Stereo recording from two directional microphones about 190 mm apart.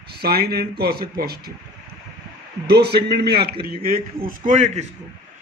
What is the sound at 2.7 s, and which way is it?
A man's voice, 60° right (ahead or behind).